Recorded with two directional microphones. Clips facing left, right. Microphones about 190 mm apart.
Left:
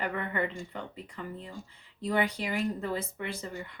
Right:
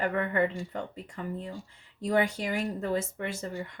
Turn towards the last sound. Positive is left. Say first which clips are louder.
# right 3 dB
turn(degrees=-45)  # may be behind; listen again after turning